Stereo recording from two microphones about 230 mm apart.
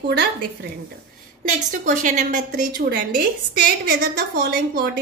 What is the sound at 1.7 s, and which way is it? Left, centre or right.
A woman's voice, right.